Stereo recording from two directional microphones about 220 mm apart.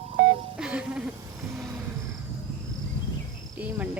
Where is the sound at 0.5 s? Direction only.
5° right (ahead or behind).